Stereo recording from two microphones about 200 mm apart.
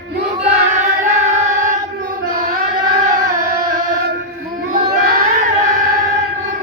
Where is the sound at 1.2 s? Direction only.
35° right (ahead or behind).